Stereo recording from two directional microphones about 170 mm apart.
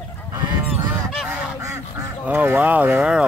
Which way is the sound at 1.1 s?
5° right (ahead or behind).